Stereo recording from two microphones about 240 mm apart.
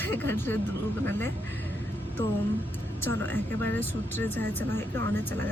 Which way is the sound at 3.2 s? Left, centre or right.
Centre.